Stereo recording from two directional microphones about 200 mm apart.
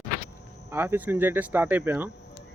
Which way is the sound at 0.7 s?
10° right (ahead or behind).